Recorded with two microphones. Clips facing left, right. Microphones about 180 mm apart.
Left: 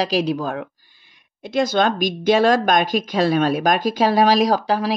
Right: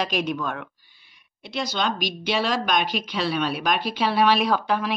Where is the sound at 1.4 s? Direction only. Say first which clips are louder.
Left 9 dB; 50° left (ahead or behind).